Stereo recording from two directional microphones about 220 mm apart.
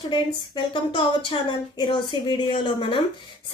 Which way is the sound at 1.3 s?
25° left (ahead or behind).